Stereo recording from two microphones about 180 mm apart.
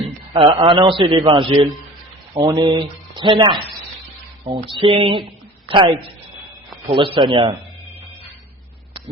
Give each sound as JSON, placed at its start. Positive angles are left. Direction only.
{"t": 0.3, "sound": "a man's voice", "side_deg": -30}